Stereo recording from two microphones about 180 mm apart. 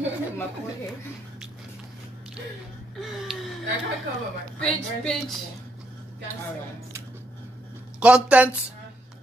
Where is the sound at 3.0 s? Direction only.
Centre (ahead or behind).